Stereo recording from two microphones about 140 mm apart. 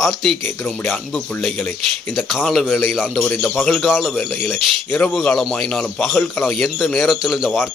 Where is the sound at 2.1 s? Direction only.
5° right (ahead or behind).